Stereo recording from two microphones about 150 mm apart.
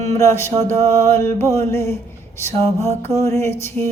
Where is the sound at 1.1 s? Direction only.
15° left (ahead or behind).